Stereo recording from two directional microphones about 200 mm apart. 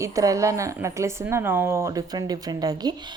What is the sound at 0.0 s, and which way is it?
Speech, 15° right (ahead or behind).